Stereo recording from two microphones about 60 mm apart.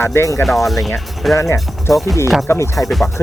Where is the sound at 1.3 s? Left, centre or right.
Left.